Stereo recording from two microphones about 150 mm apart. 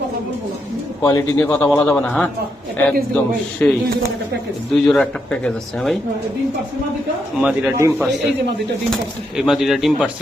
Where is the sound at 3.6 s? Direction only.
10° left (ahead or behind).